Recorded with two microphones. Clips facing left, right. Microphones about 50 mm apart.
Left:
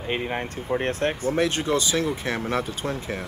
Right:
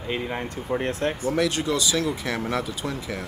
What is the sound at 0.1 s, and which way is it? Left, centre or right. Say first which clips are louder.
Speech: left 1 dB; left.